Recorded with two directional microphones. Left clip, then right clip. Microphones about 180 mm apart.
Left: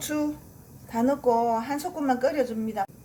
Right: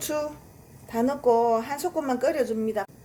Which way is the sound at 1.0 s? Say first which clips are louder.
Right 1 dB; 45° right (ahead or behind).